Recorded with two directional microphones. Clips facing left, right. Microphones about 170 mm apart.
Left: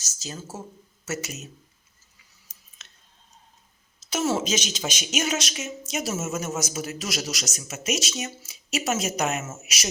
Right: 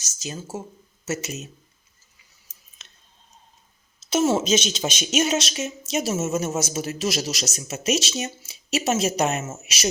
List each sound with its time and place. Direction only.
0.0 s a man's voice: 15° right (ahead or behind)
2.8 s clicking: 20° right (ahead or behind)
4.1 s a man's voice: 20° right (ahead or behind)